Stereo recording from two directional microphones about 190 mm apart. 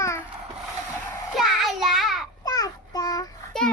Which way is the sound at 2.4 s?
20° left (ahead or behind).